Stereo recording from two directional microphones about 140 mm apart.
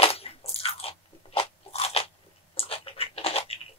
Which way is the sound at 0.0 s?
45° left (ahead or behind).